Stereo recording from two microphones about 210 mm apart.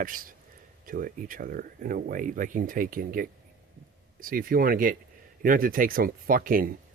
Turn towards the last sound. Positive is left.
turn(degrees=-45)  # may be behind; listen again after turning